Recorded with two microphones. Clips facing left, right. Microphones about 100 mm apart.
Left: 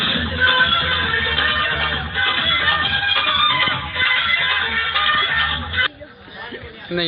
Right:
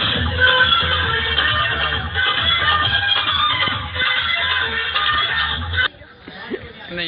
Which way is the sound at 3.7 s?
25° right (ahead or behind).